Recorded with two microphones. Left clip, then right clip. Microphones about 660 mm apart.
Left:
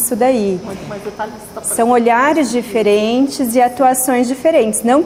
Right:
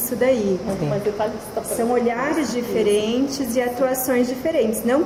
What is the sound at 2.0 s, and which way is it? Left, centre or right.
A woman's voice, left.